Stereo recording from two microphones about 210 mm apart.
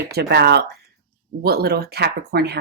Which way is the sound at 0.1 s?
50° right (ahead or behind).